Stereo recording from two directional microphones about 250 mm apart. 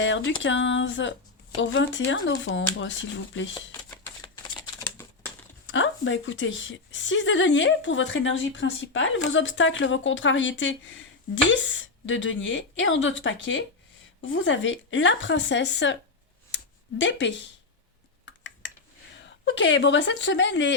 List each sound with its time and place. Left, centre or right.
0.0 s a woman's voice: left
3.5 s shuffling cards: centre
5.0 s a sound: centre
5.6 s a woman's voice: left
17.0 s a woman's voice: left
19.1 s a woman's voice: left